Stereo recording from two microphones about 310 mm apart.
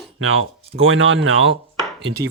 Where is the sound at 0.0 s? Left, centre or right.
Right.